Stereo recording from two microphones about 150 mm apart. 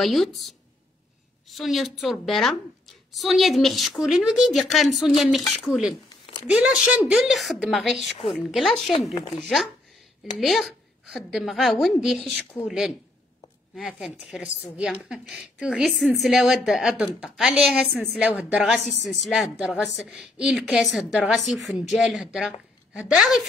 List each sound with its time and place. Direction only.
0.0 s a woman's voice: centre (ahead or behind)
6.0 s a sound: 30° left (ahead or behind)
6.6 s a woman's voice: 5° right (ahead or behind)
10.4 s a woman's voice: centre (ahead or behind)